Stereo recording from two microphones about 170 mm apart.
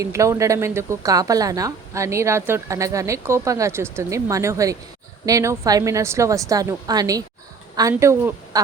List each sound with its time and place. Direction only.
0.0 s a woman's voice: 15° right (ahead or behind)